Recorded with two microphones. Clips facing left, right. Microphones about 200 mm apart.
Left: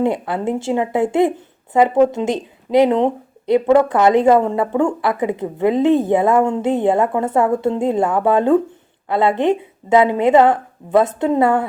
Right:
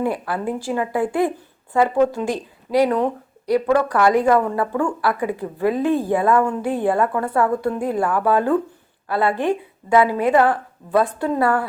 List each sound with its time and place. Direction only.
0.0 s a woman's voice: 25° left (ahead or behind)